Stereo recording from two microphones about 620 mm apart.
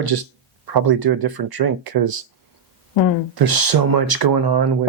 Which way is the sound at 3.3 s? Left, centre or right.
Right.